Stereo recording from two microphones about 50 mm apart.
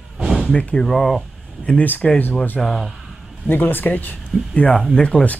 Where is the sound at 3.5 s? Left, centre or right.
Left.